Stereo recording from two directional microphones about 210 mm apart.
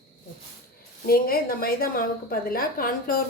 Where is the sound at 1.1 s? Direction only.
45° left (ahead or behind).